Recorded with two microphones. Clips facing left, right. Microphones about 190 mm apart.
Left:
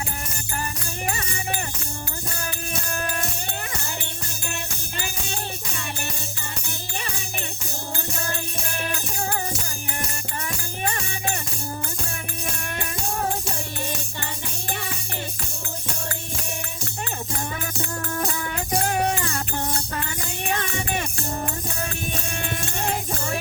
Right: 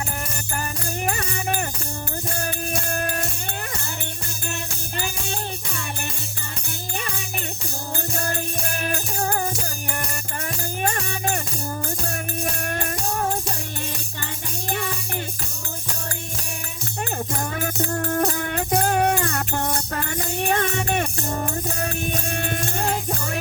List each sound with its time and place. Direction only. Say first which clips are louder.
1.0 s music: right 3 dB; 45° right (ahead or behind)
10.4 s music: right 4 dB; 45° right (ahead or behind)
17.3 s music: right 3 dB; 45° right (ahead or behind)